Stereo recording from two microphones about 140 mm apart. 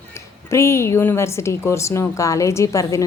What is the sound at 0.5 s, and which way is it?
A woman's voice, 20° left (ahead or behind).